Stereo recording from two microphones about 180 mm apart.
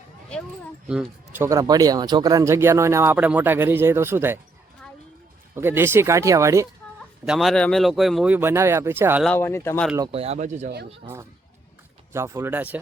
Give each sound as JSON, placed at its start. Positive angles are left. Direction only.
{"t": 0.3, "sound": "speech", "side_deg": 5}
{"t": 5.5, "sound": "speech", "side_deg": -15}
{"t": 7.3, "sound": "speech", "side_deg": 0}
{"t": 9.2, "sound": "speech", "side_deg": 10}
{"t": 10.1, "sound": "speech", "side_deg": -35}
{"t": 12.1, "sound": "speech", "side_deg": -15}